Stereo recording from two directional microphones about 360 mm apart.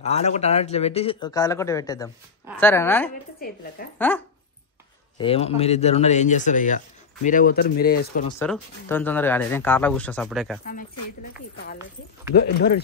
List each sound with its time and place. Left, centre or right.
0.0 s speech: centre
3.8 s speech: left
5.1 s speech: centre
8.3 s speech: centre
10.6 s speech: left
12.4 s speech: left